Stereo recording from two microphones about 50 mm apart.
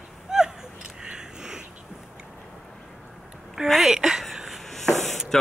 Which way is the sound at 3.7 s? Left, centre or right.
Centre.